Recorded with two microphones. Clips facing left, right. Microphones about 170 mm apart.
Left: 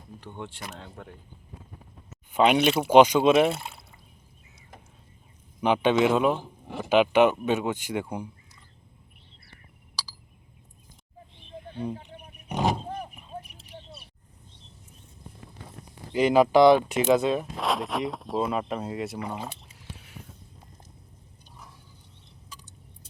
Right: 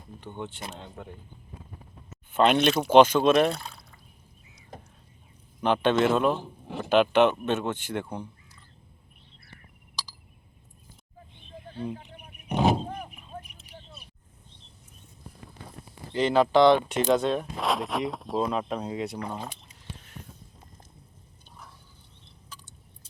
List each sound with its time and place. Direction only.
0.2 s speech: centre (ahead or behind)
2.3 s speech: 10° left (ahead or behind)
5.5 s speech: 15° left (ahead or behind)
11.9 s a sound: 25° left (ahead or behind)
13.6 s a sound: 30° left (ahead or behind)
16.1 s speech: 10° left (ahead or behind)